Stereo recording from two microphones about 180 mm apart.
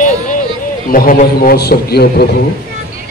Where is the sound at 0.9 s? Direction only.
50° left (ahead or behind).